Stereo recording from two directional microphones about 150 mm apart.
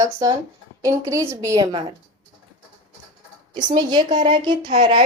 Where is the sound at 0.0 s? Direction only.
20° right (ahead or behind).